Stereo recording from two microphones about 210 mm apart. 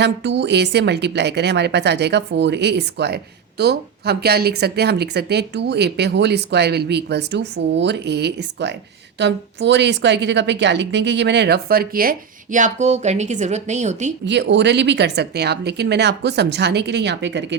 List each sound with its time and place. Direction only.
0.0 s speech: 55° right (ahead or behind); by 14.1 s 35° right (ahead or behind)
14.3 s speech: 55° right (ahead or behind)